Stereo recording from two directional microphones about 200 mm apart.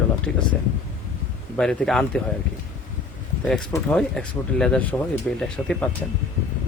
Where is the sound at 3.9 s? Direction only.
5° left (ahead or behind).